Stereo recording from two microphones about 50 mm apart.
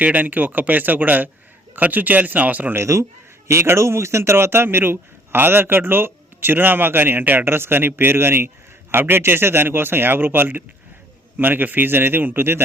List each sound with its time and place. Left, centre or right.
0.0 s speech: right
2.7 s speech: right